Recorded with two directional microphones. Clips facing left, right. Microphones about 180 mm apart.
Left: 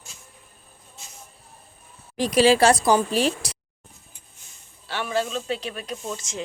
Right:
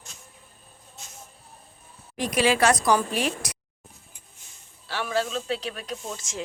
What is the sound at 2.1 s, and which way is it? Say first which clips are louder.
A woman's voice: left 5 dB; 30° left (ahead or behind).